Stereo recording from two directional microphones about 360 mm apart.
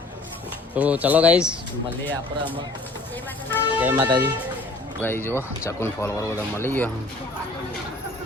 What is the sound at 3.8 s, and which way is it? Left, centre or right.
Speech, centre.